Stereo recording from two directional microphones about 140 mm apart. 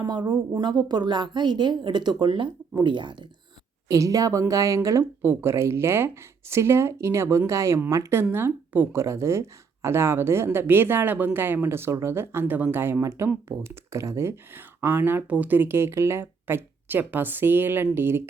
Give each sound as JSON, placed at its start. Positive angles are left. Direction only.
{"t": 0.0, "sound": "a woman's voice", "side_deg": -30}
{"t": 3.8, "sound": "a woman's voice", "side_deg": -25}